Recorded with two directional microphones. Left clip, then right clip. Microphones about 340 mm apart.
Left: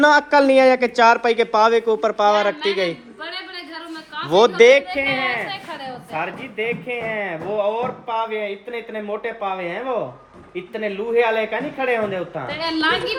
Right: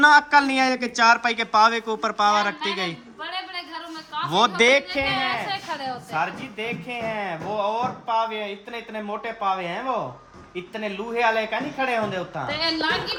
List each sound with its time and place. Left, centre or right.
0.0 s speech: centre
4.3 s speech: centre
5.1 s a sound: right
6.1 s speech: centre